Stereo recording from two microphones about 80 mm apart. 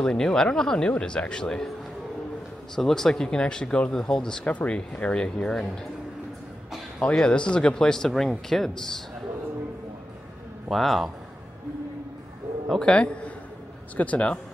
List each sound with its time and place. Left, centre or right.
0.0 s speech: centre
2.7 s speech: centre
7.1 s speech: centre
10.7 s speech: centre
12.6 s speech: centre